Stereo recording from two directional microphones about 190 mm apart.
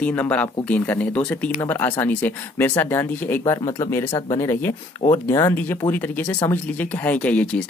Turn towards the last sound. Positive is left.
turn(degrees=5)  # may be behind; listen again after turning